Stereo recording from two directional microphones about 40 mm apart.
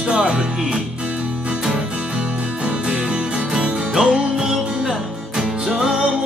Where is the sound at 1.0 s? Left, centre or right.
Right.